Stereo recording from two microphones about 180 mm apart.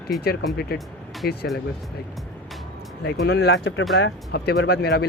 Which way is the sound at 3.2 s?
70° left (ahead or behind).